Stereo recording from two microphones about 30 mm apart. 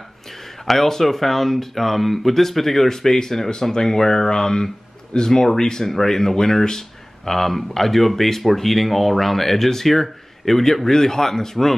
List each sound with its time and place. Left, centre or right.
0.7 s speech: centre